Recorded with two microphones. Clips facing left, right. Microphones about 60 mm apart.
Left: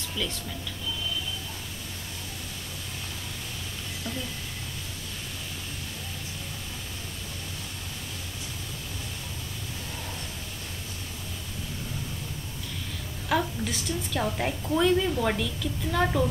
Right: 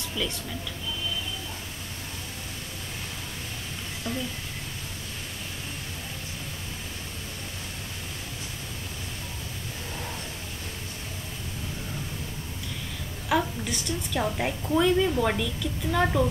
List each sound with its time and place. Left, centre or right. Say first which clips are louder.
13.3 s a woman's voice: right 1 dB; centre